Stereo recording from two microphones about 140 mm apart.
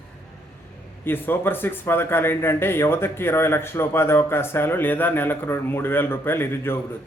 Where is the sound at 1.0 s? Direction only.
15° left (ahead or behind).